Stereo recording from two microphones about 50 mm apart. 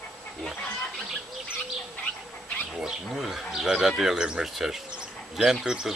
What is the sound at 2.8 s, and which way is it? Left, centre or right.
Livestock, centre.